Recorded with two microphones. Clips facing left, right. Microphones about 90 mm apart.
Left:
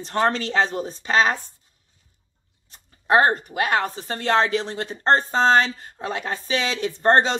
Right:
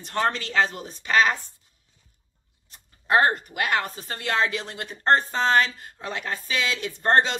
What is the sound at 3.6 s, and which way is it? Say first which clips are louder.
Speech: left 3 dB; 25° left (ahead or behind).